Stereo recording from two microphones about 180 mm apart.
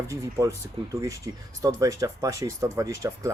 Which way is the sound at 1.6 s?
20° right (ahead or behind).